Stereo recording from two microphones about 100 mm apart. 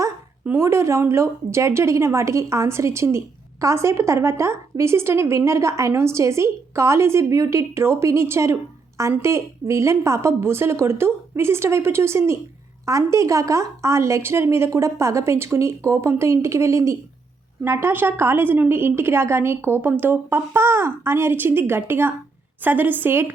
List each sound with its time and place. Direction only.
0.4 s a woman's voice: 25° right (ahead or behind)